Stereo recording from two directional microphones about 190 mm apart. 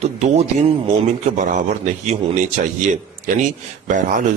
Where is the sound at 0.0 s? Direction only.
35° right (ahead or behind).